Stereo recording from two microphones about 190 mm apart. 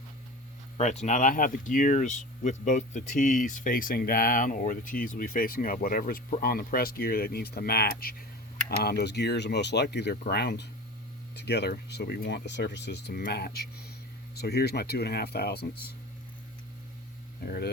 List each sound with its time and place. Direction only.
0.8 s speech: 40° left (ahead or behind); by 16.0 s 55° left (ahead or behind)